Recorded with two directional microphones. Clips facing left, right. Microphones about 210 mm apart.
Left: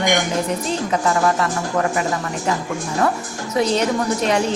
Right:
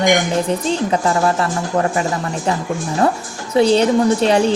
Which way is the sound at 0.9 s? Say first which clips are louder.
Left 1 dB; 30° right (ahead or behind).